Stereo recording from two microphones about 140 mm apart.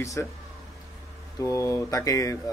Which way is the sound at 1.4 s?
20° left (ahead or behind).